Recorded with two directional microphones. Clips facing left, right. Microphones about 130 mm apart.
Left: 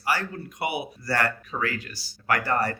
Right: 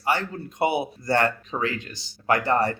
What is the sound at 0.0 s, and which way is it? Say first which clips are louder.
Speech: right 2 dB; 25° right (ahead or behind).